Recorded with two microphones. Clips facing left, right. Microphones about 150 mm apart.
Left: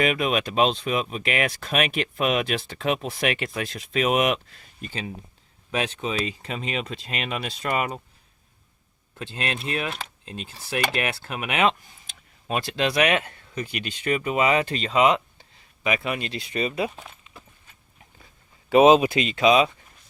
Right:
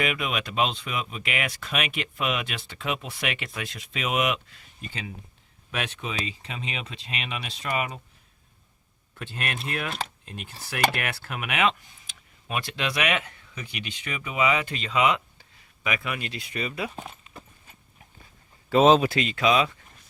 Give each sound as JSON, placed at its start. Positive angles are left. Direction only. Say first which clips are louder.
{"t": 0.0, "sound": "speech", "louder": "left 5 dB", "side_deg": 40}
{"t": 4.9, "sound": "speech", "louder": "left 4 dB", "side_deg": 35}
{"t": 9.1, "sound": "speech", "louder": "left 3 dB", "side_deg": 25}
{"t": 18.7, "sound": "speech", "louder": "left 3 dB", "side_deg": 10}